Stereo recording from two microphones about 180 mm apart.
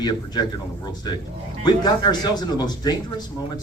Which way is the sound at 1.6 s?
25° left (ahead or behind).